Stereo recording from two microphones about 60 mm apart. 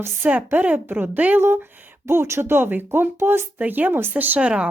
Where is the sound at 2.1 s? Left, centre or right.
Right.